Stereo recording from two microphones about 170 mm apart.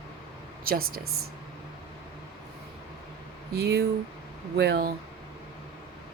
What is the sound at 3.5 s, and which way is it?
A woman's voice, 70° right (ahead or behind).